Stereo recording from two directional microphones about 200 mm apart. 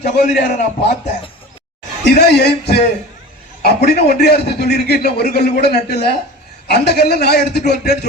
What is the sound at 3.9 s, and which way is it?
A man's voice, 55° left (ahead or behind).